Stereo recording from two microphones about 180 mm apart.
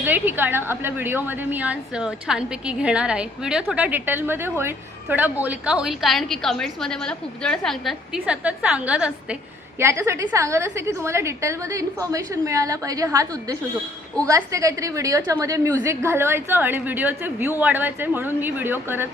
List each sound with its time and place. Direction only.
0.0 s a woman's voice: 10° right (ahead or behind)